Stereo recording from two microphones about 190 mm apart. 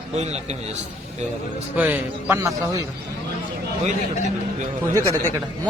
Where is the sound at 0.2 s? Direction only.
35° right (ahead or behind).